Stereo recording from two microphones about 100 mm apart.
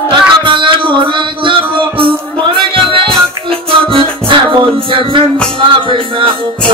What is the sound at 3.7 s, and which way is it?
Music, 60° right (ahead or behind).